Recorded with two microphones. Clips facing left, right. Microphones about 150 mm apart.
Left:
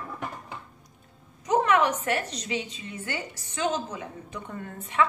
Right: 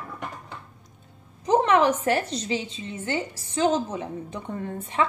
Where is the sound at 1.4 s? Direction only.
30° right (ahead or behind).